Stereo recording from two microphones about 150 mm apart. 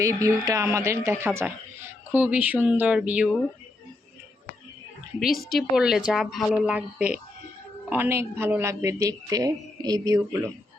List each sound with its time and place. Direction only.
0.0 s a woman's voice: 20° right (ahead or behind)
5.4 s a woman's voice: centre (ahead or behind); by 10.5 s 20° right (ahead or behind)